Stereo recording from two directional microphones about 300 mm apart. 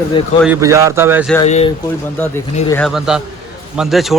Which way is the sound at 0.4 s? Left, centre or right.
Centre.